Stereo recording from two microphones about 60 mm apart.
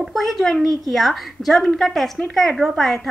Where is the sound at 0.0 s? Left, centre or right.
Centre.